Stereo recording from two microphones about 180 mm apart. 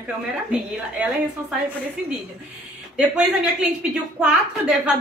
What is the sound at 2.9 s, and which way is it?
A woman's voice, 5° right (ahead or behind).